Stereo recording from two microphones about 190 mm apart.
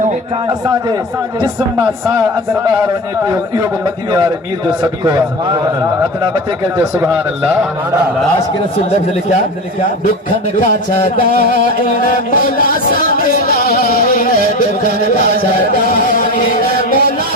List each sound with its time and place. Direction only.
4.1 s a man's voice: 20° right (ahead or behind)
10.6 s music: 45° left (ahead or behind)